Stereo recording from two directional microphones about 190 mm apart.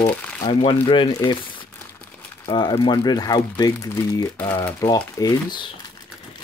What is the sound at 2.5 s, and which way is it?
Speech, 20° left (ahead or behind).